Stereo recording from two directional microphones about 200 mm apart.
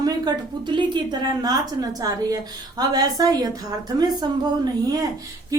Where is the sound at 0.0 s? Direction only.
20° right (ahead or behind).